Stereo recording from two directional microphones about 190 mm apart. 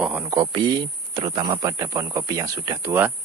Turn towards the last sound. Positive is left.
turn(degrees=-15)  # may be behind; listen again after turning